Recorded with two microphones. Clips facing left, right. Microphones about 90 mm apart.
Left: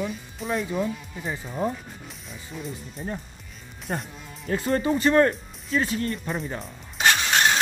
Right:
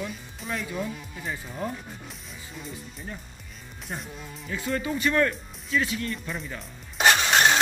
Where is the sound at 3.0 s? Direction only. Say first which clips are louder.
Left 8 dB; 40° left (ahead or behind).